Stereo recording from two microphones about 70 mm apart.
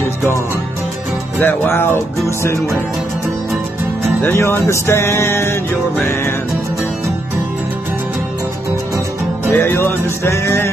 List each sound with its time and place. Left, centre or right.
1.4 s music: left
4.2 s music: left
9.5 s music: left